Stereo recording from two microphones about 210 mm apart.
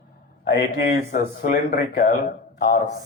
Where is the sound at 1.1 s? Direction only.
45° left (ahead or behind).